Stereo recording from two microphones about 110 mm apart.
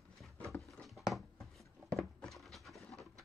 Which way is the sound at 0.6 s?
Centre (ahead or behind).